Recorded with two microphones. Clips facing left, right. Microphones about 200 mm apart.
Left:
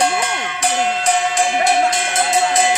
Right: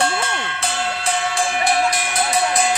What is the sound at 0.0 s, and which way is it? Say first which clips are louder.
Music: left 3 dB; 15° left (ahead or behind).